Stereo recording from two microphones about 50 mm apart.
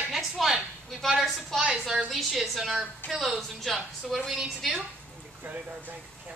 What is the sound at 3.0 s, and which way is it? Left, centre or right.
Speech, left.